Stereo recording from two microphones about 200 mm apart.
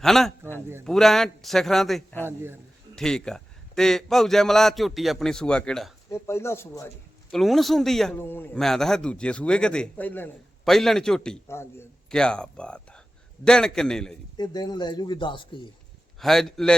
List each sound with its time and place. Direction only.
0.0 s a man's voice: centre (ahead or behind)
2.2 s a man's voice: 10° right (ahead or behind)
2.9 s a man's voice: 5° left (ahead or behind)
7.3 s a man's voice: centre (ahead or behind)
14.3 s speech: 20° left (ahead or behind)
16.2 s a man's voice: centre (ahead or behind)